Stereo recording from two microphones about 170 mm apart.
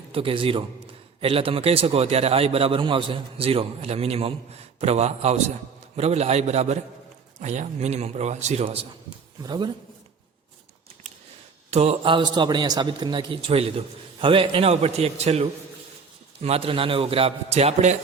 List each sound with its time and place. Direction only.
0.1 s a man's voice: 30° right (ahead or behind)
9.4 s a man's voice: 25° right (ahead or behind)
11.7 s a man's voice: 35° right (ahead or behind)